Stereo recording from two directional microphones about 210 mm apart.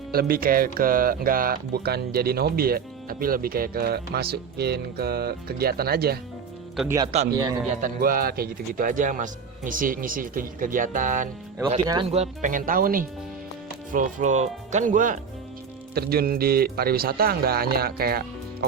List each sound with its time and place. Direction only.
0.1 s speech: 45° right (ahead or behind)
6.8 s speech: 15° right (ahead or behind)
7.7 s a man's voice: 40° right (ahead or behind)
11.9 s a man's voice: 25° right (ahead or behind); by 18.3 s 45° right (ahead or behind)